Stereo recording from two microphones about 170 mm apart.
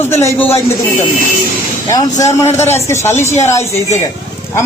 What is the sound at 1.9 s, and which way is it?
A man's voice, 20° left (ahead or behind).